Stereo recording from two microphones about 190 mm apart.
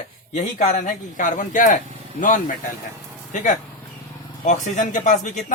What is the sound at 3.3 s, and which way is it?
Speech, 40° left (ahead or behind).